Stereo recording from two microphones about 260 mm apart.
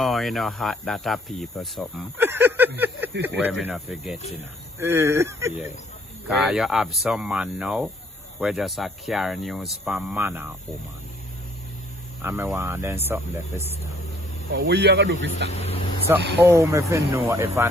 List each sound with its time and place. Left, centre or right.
0.0 s speech: centre
12.2 s speech: centre
14.5 s speech: right
15.4 s speech: left
16.4 s speech: centre